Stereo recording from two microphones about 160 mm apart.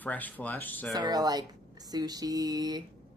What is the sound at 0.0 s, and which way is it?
Speech, 10° left (ahead or behind).